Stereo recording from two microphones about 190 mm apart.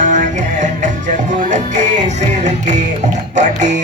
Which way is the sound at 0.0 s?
40° right (ahead or behind).